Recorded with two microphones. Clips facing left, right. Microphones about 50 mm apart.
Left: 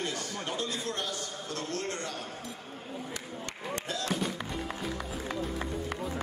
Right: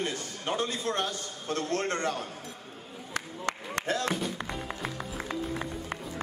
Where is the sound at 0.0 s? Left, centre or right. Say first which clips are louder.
Right 1 dB; right.